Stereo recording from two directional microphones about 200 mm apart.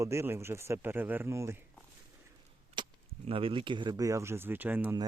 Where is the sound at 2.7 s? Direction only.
25° right (ahead or behind); by 4.9 s 10° right (ahead or behind).